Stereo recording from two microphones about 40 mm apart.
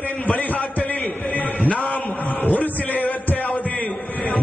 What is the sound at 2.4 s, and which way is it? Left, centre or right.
Heart sounds, left.